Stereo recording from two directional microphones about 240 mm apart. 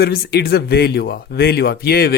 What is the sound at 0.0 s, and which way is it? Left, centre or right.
A man's voice, left.